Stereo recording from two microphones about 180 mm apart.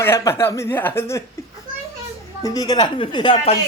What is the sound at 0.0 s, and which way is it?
Speech, 15° left (ahead or behind).